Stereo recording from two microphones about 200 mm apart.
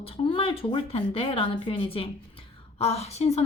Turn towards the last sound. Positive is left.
turn(degrees=30)  # may be behind; listen again after turning